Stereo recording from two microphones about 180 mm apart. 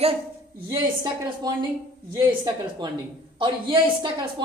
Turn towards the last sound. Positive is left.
turn(degrees=-25)  # may be behind; listen again after turning